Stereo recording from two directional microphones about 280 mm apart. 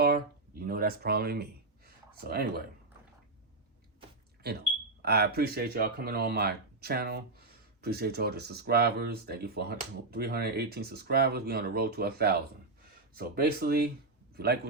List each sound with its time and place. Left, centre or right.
0.7 s speech: right
4.4 s speech: right